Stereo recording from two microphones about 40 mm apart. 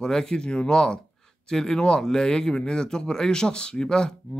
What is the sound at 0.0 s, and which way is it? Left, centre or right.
Speech, centre.